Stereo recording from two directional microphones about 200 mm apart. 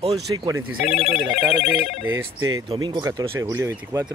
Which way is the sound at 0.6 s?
90° right.